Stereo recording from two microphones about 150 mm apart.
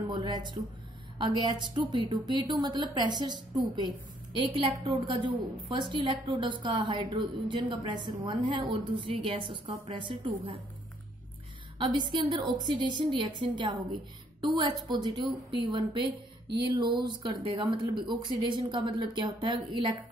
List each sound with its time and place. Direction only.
0.1 s a woman's voice: 30° right (ahead or behind)
11.8 s a woman's voice: 35° right (ahead or behind)